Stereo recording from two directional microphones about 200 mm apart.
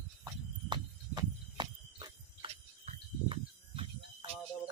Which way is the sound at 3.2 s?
25° right (ahead or behind).